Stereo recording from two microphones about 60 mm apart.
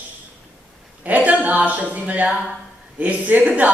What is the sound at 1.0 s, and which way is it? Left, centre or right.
Speech, right.